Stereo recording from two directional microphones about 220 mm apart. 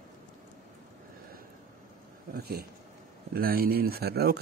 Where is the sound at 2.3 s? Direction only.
45° right (ahead or behind).